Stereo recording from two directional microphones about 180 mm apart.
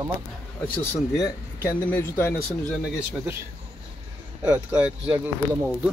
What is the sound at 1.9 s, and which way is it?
Speech, 10° left (ahead or behind).